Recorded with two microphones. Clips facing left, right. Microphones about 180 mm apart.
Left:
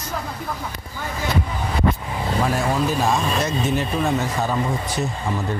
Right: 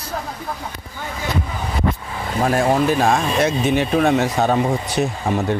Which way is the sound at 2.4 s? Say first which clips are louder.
Right 6 dB; 55° right (ahead or behind).